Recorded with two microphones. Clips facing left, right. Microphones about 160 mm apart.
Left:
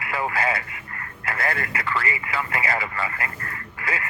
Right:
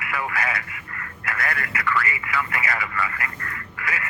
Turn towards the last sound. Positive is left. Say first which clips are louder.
# left 1 dB
turn(degrees=30)  # may be behind; listen again after turning